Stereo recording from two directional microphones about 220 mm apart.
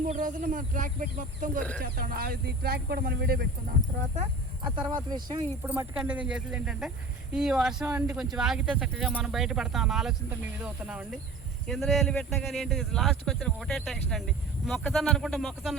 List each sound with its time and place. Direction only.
0.1 s speech: 35° right (ahead or behind)
4.1 s speech: 25° right (ahead or behind); by 15.7 s centre (ahead or behind)